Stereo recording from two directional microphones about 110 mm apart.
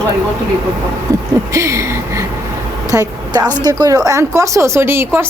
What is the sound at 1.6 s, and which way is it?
A woman's voice, 25° right (ahead or behind).